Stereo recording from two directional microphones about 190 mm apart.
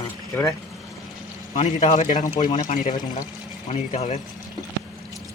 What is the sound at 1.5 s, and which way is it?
A man's voice, 40° left (ahead or behind).